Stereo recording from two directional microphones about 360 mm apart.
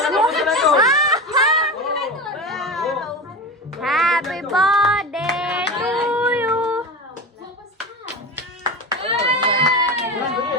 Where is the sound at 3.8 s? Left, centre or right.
Centre.